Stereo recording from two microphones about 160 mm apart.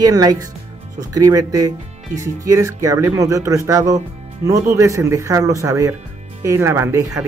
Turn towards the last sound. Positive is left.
turn(degrees=-15)  # may be behind; listen again after turning